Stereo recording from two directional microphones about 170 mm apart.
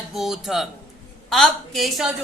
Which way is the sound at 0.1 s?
Centre (ahead or behind).